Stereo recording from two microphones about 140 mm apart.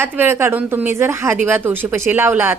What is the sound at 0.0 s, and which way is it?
Speech, 15° right (ahead or behind).